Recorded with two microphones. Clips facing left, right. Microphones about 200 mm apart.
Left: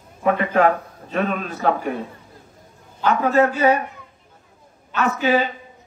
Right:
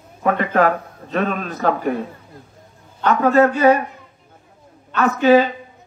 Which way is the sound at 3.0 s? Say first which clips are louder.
Right 3 dB; 40° right (ahead or behind).